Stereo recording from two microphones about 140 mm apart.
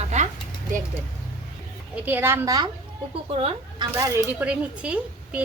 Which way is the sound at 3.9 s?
15° right (ahead or behind).